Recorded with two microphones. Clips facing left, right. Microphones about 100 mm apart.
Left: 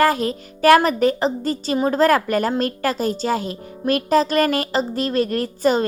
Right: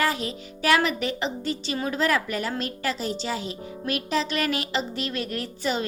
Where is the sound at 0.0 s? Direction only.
45° left (ahead or behind).